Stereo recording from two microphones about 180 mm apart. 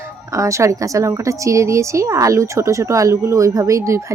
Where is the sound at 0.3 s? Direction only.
15° right (ahead or behind).